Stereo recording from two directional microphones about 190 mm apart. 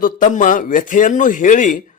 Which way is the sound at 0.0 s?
45° left (ahead or behind).